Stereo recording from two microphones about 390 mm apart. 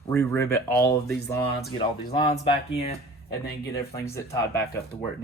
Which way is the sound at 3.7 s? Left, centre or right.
Centre.